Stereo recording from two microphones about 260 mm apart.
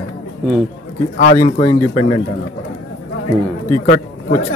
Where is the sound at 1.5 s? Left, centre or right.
Left.